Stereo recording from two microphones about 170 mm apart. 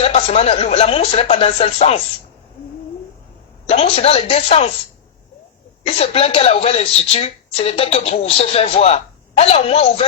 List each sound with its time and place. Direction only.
0.0 s speech: 35° left (ahead or behind)
3.7 s speech: 35° left (ahead or behind)
5.8 s speech: 35° left (ahead or behind)